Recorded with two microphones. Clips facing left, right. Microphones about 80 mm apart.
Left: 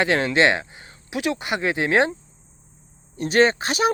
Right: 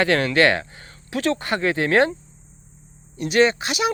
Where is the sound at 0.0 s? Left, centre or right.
Left.